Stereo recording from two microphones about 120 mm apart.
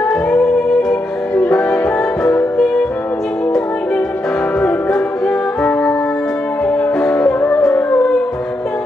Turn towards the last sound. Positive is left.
turn(degrees=20)  # may be behind; listen again after turning